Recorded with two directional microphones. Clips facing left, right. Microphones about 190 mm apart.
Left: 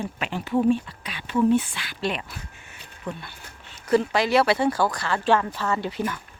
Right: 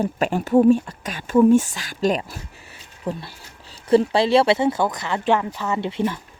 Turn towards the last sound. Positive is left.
turn(degrees=-25)  # may be behind; listen again after turning